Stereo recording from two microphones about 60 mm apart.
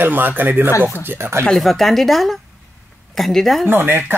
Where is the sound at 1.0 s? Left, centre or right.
Right.